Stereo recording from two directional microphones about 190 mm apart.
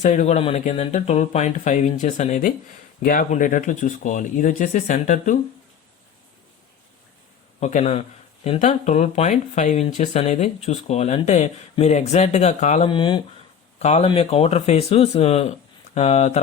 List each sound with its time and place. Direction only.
0.0 s speech: 40° left (ahead or behind)
7.6 s speech: 35° left (ahead or behind)
12.9 s speech: 25° left (ahead or behind)
13.7 s speech: 35° left (ahead or behind)